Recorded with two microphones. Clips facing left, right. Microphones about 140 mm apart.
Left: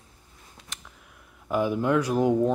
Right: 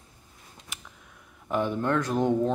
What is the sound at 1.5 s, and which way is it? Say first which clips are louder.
Speech: left 3 dB; 5° left (ahead or behind).